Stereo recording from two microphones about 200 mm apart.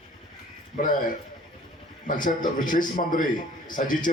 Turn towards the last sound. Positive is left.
turn(degrees=40)  # may be behind; listen again after turning